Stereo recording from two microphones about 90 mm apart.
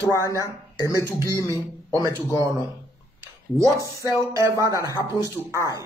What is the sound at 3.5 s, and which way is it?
Speech, 35° right (ahead or behind).